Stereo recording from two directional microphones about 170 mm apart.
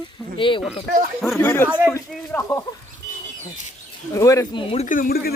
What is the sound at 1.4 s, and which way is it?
Speech, 15° left (ahead or behind).